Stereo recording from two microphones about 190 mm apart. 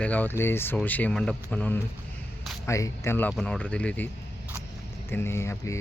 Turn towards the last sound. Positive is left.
turn(degrees=15)  # may be behind; listen again after turning